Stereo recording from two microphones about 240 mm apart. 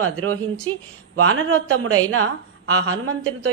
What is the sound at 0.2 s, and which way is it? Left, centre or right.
Speech, right.